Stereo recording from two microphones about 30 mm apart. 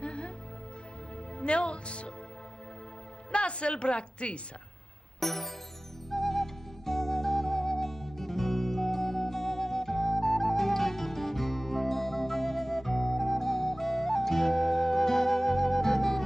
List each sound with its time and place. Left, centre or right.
0.0 s music: left
1.4 s speech: left
3.3 s a woman's voice: left
5.2 s music: centre